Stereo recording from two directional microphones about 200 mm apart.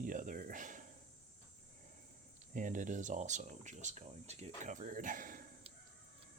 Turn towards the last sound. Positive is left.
turn(degrees=-40)  # may be behind; listen again after turning